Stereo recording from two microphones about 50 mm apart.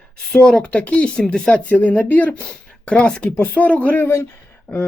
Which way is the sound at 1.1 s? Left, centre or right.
Centre.